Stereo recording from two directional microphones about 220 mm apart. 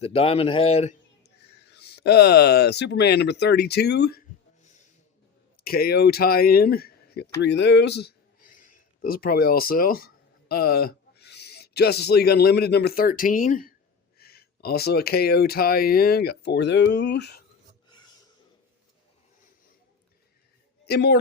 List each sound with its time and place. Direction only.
0.0 s speech: 25° left (ahead or behind)
1.8 s speech: 45° left (ahead or behind)
5.6 s speech: 45° left (ahead or behind)
20.8 s a man's voice: 50° left (ahead or behind)